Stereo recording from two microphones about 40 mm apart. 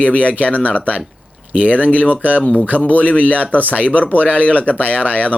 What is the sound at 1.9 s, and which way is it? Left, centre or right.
Speech, left.